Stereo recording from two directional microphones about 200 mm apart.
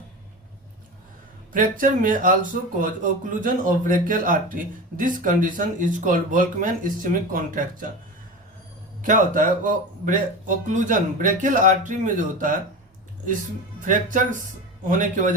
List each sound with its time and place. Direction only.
1.5 s speech: 45° right (ahead or behind)
9.0 s speech: 40° right (ahead or behind)
13.8 s speech: 40° right (ahead or behind)